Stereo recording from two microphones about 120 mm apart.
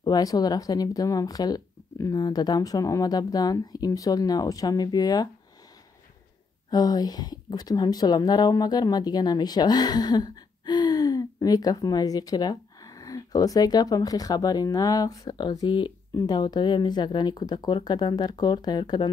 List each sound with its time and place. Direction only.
0.0 s a woman's voice: 30° left (ahead or behind)
6.7 s a woman's voice: 35° left (ahead or behind)